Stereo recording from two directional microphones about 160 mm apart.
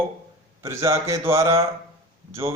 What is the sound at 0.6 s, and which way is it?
Speech, 15° right (ahead or behind).